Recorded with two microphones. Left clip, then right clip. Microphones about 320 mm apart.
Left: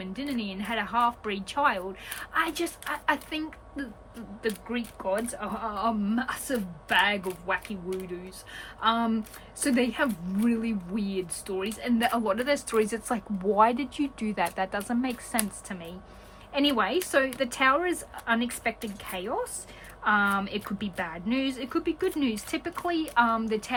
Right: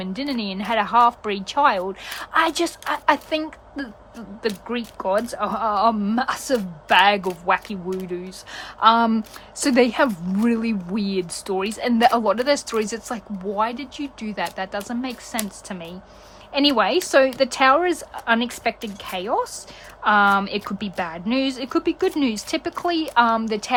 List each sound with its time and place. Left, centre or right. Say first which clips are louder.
0.0 s a woman's voice: right 7 dB; centre